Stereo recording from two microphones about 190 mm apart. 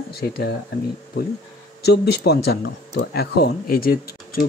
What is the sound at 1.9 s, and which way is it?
Speech, 60° left (ahead or behind).